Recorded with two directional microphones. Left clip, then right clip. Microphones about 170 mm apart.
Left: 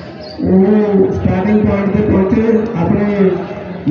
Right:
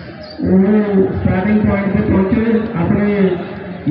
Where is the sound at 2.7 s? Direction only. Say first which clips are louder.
Left 1 dB; 25° left (ahead or behind).